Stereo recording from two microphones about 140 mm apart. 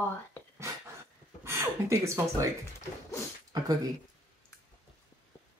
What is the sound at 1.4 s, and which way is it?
Speech, 20° right (ahead or behind).